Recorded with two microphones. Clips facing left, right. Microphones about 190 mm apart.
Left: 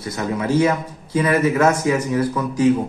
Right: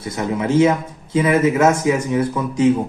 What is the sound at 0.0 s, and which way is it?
Speech, 25° right (ahead or behind).